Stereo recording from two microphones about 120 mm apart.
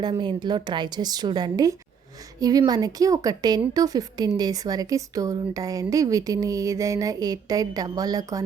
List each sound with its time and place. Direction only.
0.0 s a woman's voice: 40° right (ahead or behind)